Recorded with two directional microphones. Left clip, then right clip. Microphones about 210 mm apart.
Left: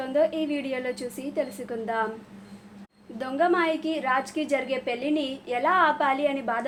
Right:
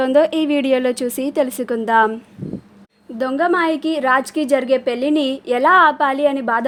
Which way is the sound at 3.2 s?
50° right (ahead or behind).